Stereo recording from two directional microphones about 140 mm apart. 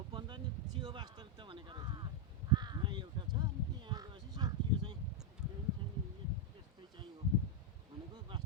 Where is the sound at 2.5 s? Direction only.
30° right (ahead or behind).